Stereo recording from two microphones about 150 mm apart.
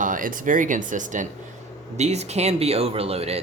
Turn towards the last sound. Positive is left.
turn(degrees=-40)  # may be behind; listen again after turning